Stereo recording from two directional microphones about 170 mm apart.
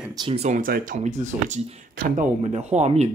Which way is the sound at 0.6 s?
55° right (ahead or behind).